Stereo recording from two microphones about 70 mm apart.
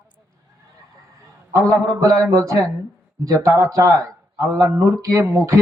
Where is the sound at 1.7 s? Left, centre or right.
Right.